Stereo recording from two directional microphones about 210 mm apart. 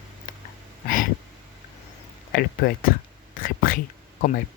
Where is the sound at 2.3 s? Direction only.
45° left (ahead or behind).